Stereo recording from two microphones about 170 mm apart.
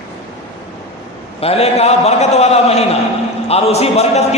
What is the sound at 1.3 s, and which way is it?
A man's voice, 35° left (ahead or behind).